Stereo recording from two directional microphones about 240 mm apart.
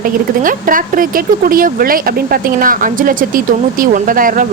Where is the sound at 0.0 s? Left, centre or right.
Right.